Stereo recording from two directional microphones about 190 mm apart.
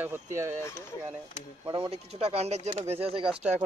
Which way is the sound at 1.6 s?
25° right (ahead or behind).